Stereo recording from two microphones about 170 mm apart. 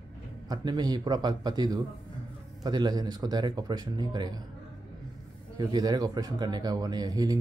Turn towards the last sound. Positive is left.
turn(degrees=-20)  # may be behind; listen again after turning